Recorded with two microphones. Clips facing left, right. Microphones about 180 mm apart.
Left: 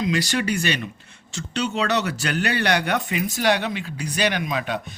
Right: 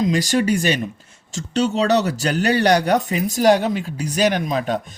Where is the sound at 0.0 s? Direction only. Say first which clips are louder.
Right 5 dB; 45° right (ahead or behind).